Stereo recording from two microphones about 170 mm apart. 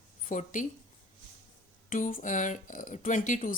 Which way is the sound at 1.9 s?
55° left (ahead or behind).